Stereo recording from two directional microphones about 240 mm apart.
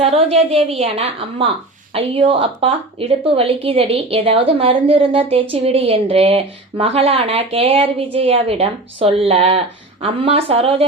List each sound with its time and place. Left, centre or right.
0.0 s a woman's voice: right